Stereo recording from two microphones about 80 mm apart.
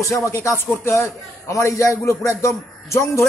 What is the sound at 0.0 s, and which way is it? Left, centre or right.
A man's voice, left.